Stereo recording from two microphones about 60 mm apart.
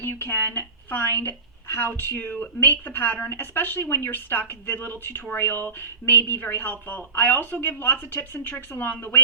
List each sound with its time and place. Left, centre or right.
0.1 s a woman's voice: left